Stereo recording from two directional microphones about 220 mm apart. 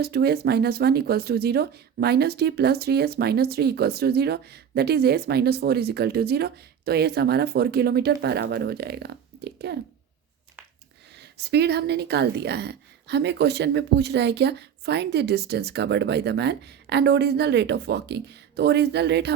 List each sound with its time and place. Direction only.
0.0 s speech: 45° right (ahead or behind)
11.2 s speech: 50° right (ahead or behind)